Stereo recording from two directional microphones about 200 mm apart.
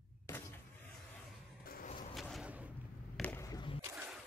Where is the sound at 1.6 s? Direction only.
45° left (ahead or behind).